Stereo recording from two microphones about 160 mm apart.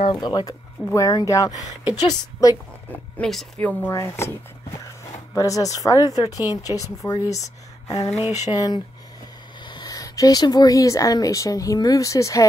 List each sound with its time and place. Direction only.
0.0 s a woman's voice: 25° left (ahead or behind)
2.9 s speech: 5° left (ahead or behind)
3.6 s speech: 15° left (ahead or behind)
5.3 s a woman's voice: 20° left (ahead or behind)